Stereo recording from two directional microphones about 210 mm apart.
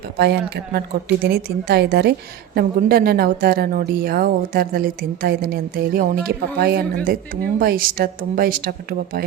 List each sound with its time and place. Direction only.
0.2 s a woman's voice: 50° right (ahead or behind)